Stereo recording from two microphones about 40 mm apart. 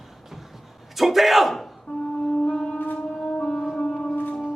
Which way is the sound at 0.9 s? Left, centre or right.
Centre.